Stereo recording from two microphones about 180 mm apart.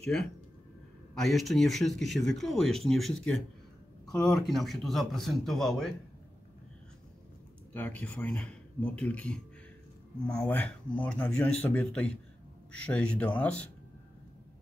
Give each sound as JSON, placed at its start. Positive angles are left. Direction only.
{"t": 0.0, "sound": "speech", "side_deg": 5}
{"t": 7.7, "sound": "speech", "side_deg": 10}